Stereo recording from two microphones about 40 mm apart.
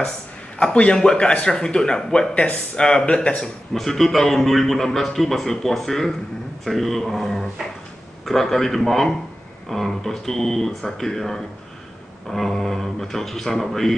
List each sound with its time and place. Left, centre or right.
0.6 s speech: left
2.3 s speech: left
3.7 s a man's voice: centre